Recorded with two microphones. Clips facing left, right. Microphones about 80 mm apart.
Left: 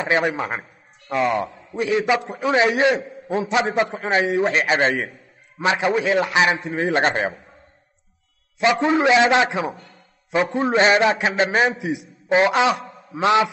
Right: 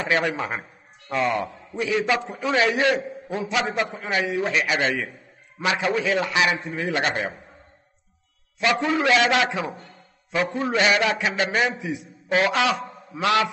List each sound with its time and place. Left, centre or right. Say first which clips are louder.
0.0 s a man's voice: left 3 dB; centre; by 7.2 s left
8.5 s a man's voice: left 4 dB; left
11.8 s a man's voice: left 4 dB; left
12.3 s a man's voice: left 4 dB; left